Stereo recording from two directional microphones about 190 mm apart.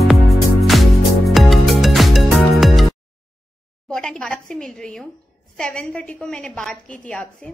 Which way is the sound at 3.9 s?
5° left (ahead or behind).